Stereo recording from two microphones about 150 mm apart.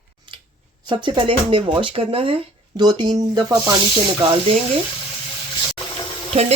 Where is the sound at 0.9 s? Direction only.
30° right (ahead or behind).